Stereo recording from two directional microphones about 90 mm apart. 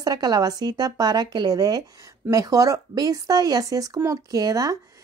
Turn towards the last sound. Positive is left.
turn(degrees=-40)  # may be behind; listen again after turning